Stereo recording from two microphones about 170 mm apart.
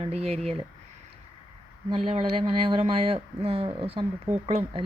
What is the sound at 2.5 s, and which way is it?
Speech, 35° right (ahead or behind).